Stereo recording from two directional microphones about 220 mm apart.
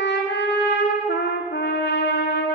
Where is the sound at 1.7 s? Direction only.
50° left (ahead or behind).